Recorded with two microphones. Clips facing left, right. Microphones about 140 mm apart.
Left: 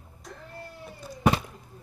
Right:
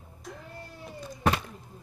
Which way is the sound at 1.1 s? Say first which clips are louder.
Left 3 dB; 15° left (ahead or behind).